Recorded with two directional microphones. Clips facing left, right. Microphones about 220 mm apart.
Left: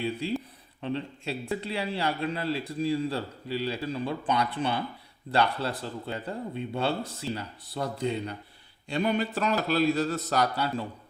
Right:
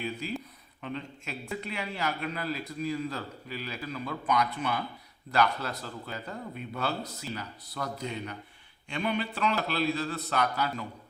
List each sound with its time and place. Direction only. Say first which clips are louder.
0.0 s a man's voice: left 5 dB; 30° left (ahead or behind)